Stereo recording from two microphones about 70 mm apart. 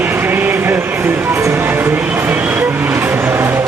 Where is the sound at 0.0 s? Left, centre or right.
Right.